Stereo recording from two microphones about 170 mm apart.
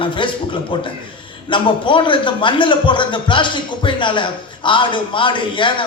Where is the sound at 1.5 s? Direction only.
30° left (ahead or behind).